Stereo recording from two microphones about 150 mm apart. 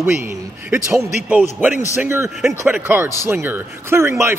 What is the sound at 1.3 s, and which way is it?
Speech, 10° right (ahead or behind).